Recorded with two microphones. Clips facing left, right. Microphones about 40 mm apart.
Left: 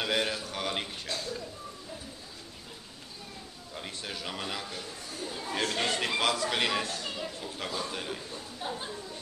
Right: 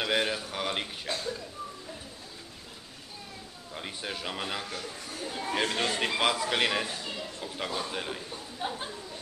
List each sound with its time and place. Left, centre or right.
0.0 s speech: centre
1.0 s a man's voice: right
3.7 s speech: centre
4.6 s a man's voice: right
5.2 s a man's voice: right